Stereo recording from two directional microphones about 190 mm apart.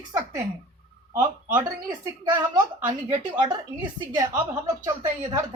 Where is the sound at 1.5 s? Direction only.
20° right (ahead or behind).